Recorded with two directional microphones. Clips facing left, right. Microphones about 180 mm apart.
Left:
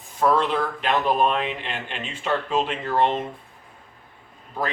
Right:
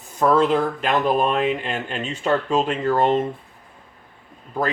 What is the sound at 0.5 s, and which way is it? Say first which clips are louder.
Speech: right 3 dB; 45° right (ahead or behind).